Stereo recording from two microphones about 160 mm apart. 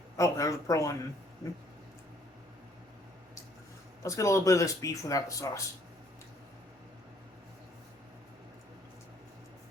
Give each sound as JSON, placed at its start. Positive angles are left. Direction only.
{"t": 0.2, "sound": "speech", "side_deg": 20}
{"t": 4.0, "sound": "speech", "side_deg": 20}